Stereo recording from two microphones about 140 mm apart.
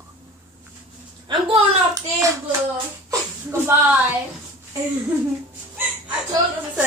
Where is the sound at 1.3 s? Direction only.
35° right (ahead or behind).